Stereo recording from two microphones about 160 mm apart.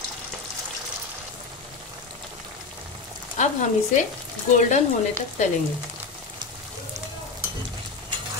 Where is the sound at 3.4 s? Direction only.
50° left (ahead or behind).